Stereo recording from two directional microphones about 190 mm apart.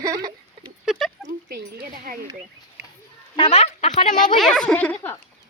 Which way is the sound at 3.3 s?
30° left (ahead or behind).